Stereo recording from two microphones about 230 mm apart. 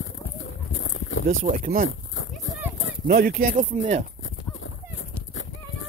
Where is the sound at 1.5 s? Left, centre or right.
Right.